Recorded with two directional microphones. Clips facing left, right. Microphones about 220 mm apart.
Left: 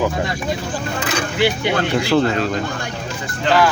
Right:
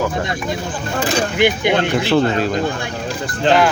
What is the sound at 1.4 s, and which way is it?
Speech, 15° right (ahead or behind).